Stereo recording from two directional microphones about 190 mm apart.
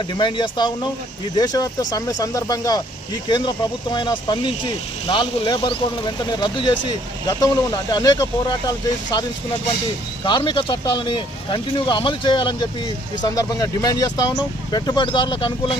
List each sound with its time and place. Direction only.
0.1 s speech: 25° left (ahead or behind)
10.2 s speech: 25° left (ahead or behind)